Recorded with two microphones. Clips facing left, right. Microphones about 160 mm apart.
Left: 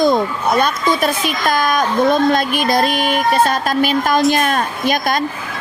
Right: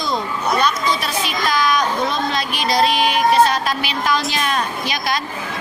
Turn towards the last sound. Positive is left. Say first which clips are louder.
# left 6 dB
turn(degrees=50)  # may be behind; listen again after turning